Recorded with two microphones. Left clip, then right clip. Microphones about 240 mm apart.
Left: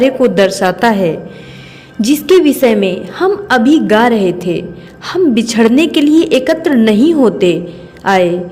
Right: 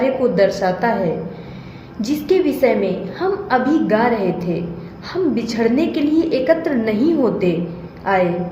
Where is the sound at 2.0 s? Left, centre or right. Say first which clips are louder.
Left 8 dB; left.